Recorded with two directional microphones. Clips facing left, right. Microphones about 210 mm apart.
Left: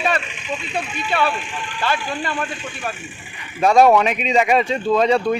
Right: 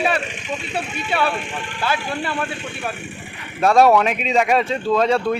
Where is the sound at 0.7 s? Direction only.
10° right (ahead or behind).